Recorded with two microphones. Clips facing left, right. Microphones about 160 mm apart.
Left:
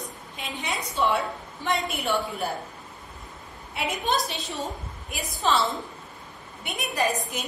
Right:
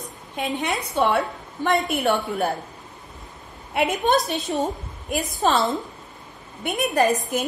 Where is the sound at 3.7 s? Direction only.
55° right (ahead or behind).